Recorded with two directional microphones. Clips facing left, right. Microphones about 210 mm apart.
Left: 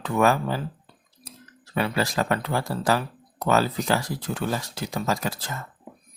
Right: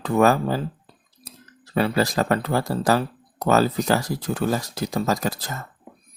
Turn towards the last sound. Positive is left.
turn(degrees=-40)  # may be behind; listen again after turning